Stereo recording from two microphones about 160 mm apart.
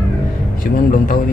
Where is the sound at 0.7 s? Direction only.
60° left (ahead or behind).